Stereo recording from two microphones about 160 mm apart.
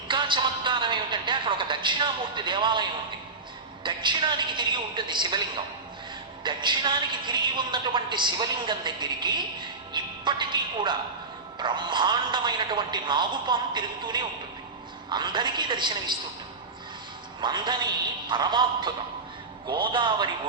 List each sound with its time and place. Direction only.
0.1 s a sound: 30° right (ahead or behind)
3.8 s a woman's voice: 30° right (ahead or behind)
17.4 s a woman's voice: 30° right (ahead or behind)